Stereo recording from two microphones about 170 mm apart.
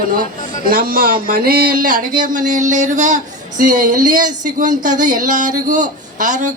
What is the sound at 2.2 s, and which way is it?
Speech, 50° right (ahead or behind).